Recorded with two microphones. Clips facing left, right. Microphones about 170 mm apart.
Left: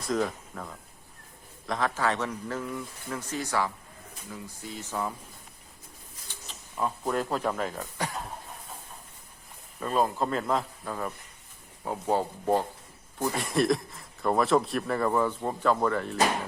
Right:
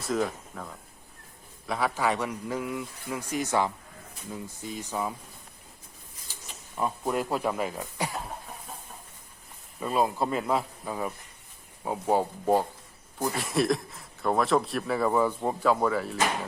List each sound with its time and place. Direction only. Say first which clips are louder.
0.0 s speech: even; centre (ahead or behind)
6.2 s speech: even; 10° right (ahead or behind)
9.8 s speech: even; 10° right (ahead or behind)
13.2 s speech: left 1 dB; centre (ahead or behind)